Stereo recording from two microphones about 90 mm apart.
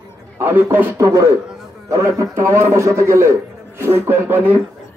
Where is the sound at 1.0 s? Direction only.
35° right (ahead or behind).